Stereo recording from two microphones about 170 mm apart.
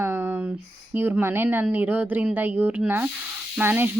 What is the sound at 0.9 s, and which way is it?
A woman's voice, 10° right (ahead or behind).